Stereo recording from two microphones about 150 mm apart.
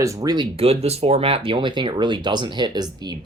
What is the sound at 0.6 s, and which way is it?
Speech, 45° right (ahead or behind).